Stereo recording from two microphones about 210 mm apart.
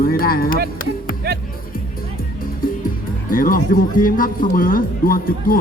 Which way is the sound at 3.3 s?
40° left (ahead or behind).